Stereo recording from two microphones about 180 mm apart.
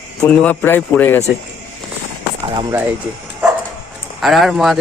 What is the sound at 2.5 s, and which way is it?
Speech, 25° right (ahead or behind).